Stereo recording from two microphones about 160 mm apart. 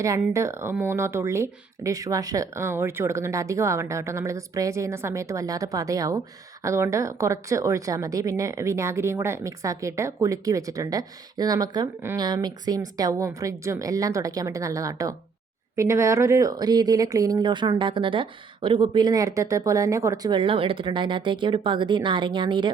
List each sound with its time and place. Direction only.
0.0 s speech: 20° right (ahead or behind)